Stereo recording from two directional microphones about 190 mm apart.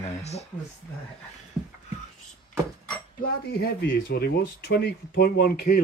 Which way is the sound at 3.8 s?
55° left (ahead or behind).